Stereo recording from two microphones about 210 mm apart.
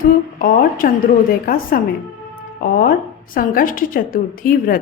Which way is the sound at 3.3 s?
40° left (ahead or behind).